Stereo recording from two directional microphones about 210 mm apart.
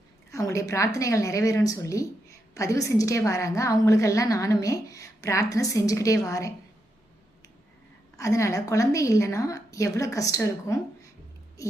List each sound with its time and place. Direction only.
0.3 s a sound: 15° left (ahead or behind)
0.9 s a woman's voice: 15° left (ahead or behind)
8.1 s a woman's voice: 15° left (ahead or behind)